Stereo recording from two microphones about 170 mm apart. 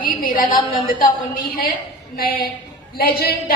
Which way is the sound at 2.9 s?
60° left (ahead or behind).